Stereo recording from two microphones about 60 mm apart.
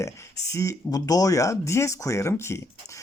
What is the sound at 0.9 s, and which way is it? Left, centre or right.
Speech, left.